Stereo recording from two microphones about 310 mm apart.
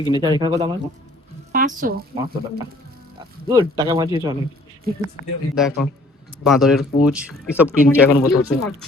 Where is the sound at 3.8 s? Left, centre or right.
Centre.